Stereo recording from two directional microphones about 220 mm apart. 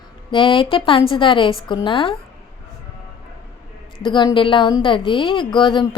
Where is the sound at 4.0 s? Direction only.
20° left (ahead or behind).